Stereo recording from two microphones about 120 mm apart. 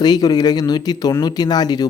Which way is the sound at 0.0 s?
35° left (ahead or behind).